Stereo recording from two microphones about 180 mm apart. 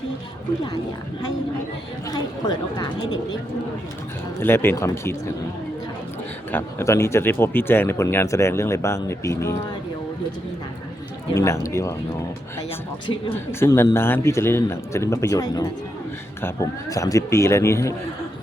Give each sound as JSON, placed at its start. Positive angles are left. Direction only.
{"t": 2.7, "sound": "speech", "side_deg": 25}
{"t": 4.4, "sound": "speech", "side_deg": 15}
{"t": 6.5, "sound": "speech", "side_deg": 15}
{"t": 11.3, "sound": "speech", "side_deg": 15}
{"t": 13.5, "sound": "speech", "side_deg": 15}